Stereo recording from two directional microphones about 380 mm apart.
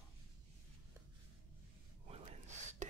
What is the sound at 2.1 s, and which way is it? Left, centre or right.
Gasp, centre.